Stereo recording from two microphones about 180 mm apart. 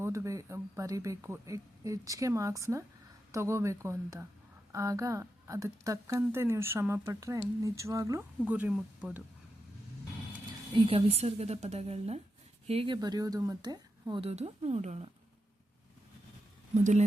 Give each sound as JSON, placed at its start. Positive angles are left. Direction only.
{"t": 0.0, "sound": "speech", "side_deg": -15}
{"t": 10.8, "sound": "a woman's voice", "side_deg": -30}
{"t": 14.3, "sound": "a woman's voice", "side_deg": -35}
{"t": 16.7, "sound": "a woman's voice", "side_deg": -40}